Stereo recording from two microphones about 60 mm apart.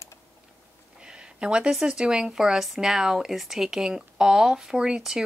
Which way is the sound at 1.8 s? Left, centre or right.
Centre.